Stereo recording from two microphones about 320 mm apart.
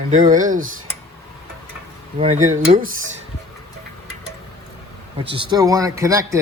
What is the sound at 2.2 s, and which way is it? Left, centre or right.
Speech, right.